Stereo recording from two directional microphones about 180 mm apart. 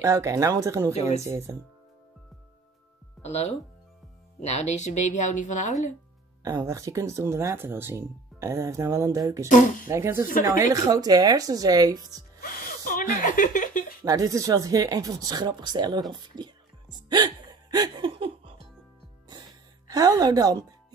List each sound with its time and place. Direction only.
0.0 s speech: 15° right (ahead or behind)
3.3 s speech: 40° left (ahead or behind)
6.4 s speech: 20° right (ahead or behind)
9.5 s speech: 45° left (ahead or behind)
9.8 s speech: 15° right (ahead or behind)
12.4 s zipper: 50° left (ahead or behind)
14.0 s speech: 20° right (ahead or behind)
19.9 s speech: 20° right (ahead or behind)